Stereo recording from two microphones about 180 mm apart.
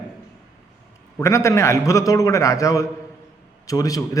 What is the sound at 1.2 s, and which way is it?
A man's voice, 15° left (ahead or behind).